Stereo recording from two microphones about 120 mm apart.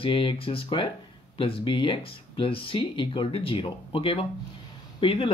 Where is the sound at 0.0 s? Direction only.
45° left (ahead or behind).